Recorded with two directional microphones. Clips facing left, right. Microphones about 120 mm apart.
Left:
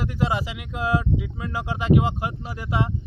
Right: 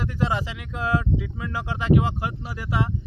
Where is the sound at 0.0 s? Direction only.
15° left (ahead or behind).